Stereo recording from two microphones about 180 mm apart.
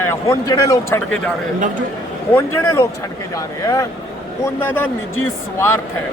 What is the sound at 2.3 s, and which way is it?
Speech, 15° left (ahead or behind).